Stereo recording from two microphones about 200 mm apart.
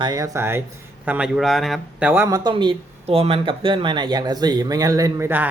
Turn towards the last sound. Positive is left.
turn(degrees=-10)  # may be behind; listen again after turning